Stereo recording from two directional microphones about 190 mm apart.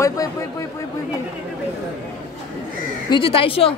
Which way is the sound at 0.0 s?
15° left (ahead or behind).